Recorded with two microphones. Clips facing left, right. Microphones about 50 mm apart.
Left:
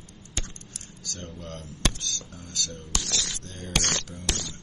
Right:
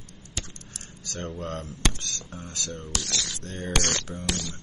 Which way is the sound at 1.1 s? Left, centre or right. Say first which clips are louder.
Right 7 dB; right.